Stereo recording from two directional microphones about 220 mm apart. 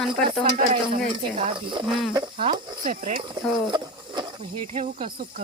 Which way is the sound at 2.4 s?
40° right (ahead or behind).